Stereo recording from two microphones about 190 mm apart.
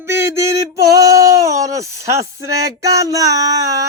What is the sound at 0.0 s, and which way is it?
Male singing, 15° right (ahead or behind).